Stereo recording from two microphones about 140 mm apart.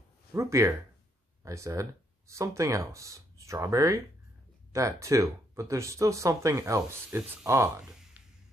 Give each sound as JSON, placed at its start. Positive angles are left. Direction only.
{"t": 0.3, "sound": "speech", "side_deg": -20}